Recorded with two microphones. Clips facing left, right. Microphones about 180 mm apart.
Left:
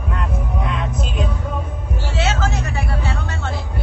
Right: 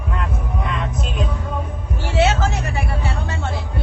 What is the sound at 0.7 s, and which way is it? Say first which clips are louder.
Music: left 1 dB; centre (ahead or behind).